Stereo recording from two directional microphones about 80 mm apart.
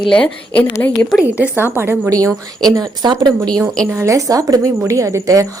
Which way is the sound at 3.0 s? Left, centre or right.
Right.